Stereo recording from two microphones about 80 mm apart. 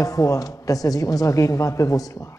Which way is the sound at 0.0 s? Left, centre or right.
Left.